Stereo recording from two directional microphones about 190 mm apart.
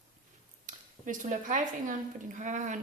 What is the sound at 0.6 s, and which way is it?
A woman's voice, 40° right (ahead or behind).